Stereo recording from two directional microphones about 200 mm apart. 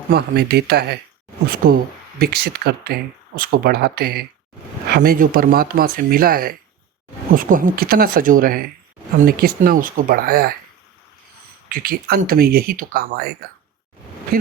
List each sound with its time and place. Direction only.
0.1 s speech: 55° right (ahead or behind)
11.7 s speech: 50° right (ahead or behind)